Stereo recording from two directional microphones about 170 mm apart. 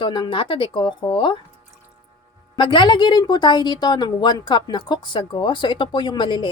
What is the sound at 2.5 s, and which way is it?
A woman's voice, 30° left (ahead or behind).